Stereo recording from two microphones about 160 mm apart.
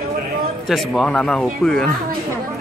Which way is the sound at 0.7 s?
Centre (ahead or behind).